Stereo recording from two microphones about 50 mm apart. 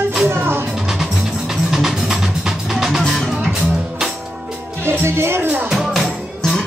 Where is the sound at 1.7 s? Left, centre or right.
Centre.